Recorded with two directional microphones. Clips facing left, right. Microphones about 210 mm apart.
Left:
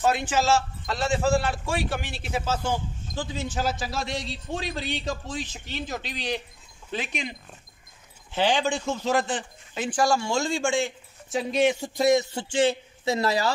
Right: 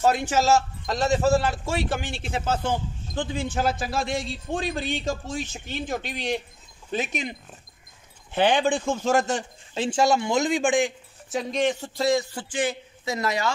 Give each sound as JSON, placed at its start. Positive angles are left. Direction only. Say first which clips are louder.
{"t": 0.0, "sound": "a man's voice", "louder": "right 2 dB", "side_deg": -40}
{"t": 2.3, "sound": "a man's voice", "louder": "right 1 dB", "side_deg": -55}
{"t": 9.8, "sound": "speech", "louder": "right 2 dB", "side_deg": -25}
{"t": 11.2, "sound": "speech", "louder": "left 2 dB", "side_deg": 5}